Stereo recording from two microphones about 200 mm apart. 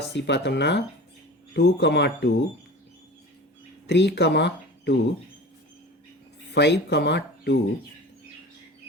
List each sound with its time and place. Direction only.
0.1 s speech: 60° left (ahead or behind)
3.8 s speech: 55° left (ahead or behind)
6.5 s speech: 60° left (ahead or behind)